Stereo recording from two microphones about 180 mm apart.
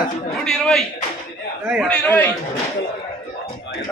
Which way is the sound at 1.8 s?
10° left (ahead or behind).